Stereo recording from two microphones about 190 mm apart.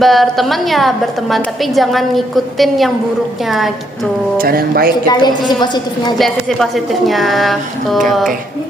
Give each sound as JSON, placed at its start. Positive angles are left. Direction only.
{"t": 0.0, "sound": "a woman's voice", "side_deg": 0}
{"t": 4.4, "sound": "speech", "side_deg": -50}
{"t": 5.0, "sound": "a woman's voice", "side_deg": 20}
{"t": 6.1, "sound": "a woman's voice", "side_deg": 0}